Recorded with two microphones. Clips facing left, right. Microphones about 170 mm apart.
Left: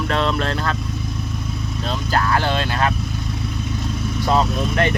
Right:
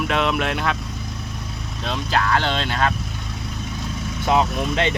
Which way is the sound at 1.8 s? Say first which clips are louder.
Left 1 dB; centre (ahead or behind).